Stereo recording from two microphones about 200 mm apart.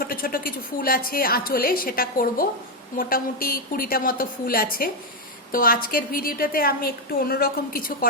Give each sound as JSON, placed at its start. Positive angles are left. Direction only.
{"t": 0.0, "sound": "a woman's voice", "side_deg": 45}